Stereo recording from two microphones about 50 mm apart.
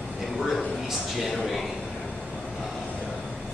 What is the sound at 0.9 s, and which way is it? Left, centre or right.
Speech, centre.